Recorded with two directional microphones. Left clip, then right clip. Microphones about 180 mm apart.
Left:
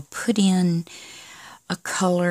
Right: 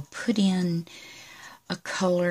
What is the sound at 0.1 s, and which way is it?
Speech, 45° left (ahead or behind).